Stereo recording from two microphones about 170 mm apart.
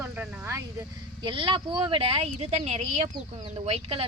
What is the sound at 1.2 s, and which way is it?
Speech, 30° right (ahead or behind).